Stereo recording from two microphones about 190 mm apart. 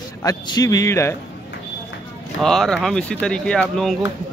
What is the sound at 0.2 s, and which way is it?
Speech, 20° left (ahead or behind).